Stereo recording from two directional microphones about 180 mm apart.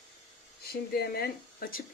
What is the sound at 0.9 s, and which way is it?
Speech, 60° left (ahead or behind).